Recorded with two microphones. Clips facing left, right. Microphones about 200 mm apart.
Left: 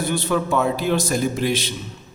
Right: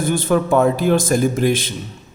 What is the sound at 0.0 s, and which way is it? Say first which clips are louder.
A man's voice: right 4 dB; 50° right (ahead or behind).